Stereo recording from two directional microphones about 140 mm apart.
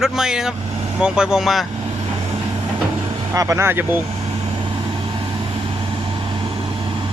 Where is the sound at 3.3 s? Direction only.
20° right (ahead or behind).